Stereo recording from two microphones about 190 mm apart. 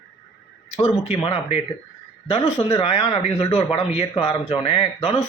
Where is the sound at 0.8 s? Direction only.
30° left (ahead or behind).